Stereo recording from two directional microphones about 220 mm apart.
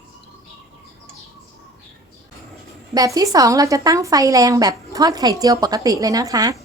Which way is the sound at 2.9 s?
15° right (ahead or behind).